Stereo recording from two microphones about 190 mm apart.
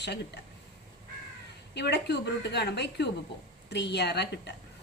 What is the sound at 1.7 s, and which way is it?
A woman's voice, 60° left (ahead or behind).